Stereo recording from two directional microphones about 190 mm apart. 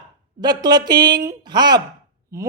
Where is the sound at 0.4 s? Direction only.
20° right (ahead or behind).